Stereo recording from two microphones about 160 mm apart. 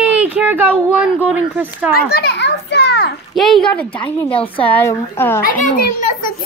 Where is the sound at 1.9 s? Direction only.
85° left.